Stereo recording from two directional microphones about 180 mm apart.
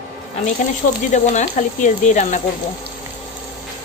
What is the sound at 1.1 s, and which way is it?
A woman's voice, 40° left (ahead or behind).